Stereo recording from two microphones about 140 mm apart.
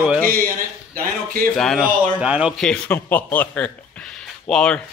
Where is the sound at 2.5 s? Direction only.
5° left (ahead or behind).